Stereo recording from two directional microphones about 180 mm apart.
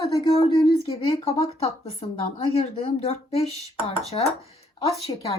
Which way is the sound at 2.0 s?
35° left (ahead or behind).